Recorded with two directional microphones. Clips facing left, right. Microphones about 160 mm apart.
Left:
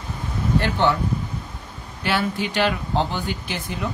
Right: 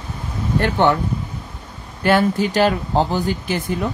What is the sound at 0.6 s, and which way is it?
Speech, 50° right (ahead or behind).